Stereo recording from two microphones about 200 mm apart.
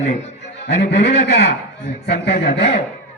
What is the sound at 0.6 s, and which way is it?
A man's voice, 60° left (ahead or behind).